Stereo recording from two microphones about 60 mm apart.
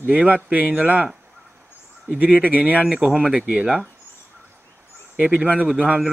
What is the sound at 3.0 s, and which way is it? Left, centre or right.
Speech, centre.